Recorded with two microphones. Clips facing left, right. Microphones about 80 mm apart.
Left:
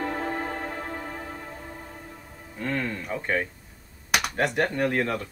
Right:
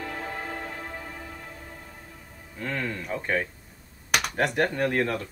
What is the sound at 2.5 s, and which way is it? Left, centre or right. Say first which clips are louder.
Speech: left 2 dB; centre.